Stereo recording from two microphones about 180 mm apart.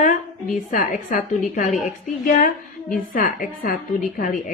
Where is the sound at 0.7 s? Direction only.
45° left (ahead or behind).